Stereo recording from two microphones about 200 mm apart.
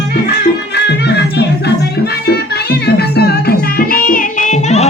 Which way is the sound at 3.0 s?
50° left (ahead or behind).